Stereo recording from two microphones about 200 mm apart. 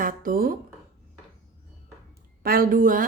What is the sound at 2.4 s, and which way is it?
Speech, 45° right (ahead or behind).